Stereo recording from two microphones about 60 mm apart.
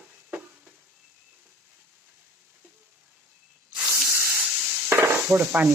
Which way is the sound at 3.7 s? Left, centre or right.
Centre.